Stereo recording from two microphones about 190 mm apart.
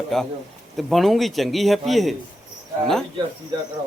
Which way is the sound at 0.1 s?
Centre (ahead or behind).